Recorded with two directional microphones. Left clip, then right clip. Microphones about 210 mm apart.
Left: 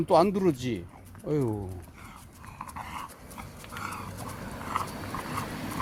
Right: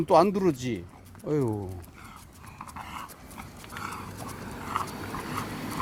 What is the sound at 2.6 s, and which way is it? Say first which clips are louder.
Dog: left 1 dB; 5° left (ahead or behind).